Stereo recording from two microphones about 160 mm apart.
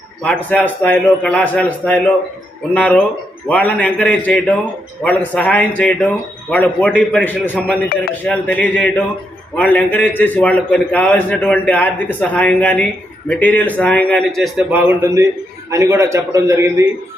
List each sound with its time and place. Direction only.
0.2 s a man's voice: 5° left (ahead or behind); by 16.8 s 15° right (ahead or behind)